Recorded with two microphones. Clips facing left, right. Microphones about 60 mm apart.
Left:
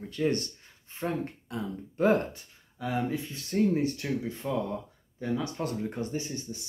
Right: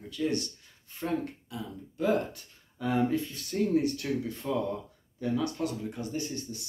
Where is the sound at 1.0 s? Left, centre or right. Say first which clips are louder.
Even; left.